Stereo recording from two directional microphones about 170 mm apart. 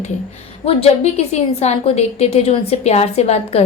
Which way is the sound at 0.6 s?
35° left (ahead or behind).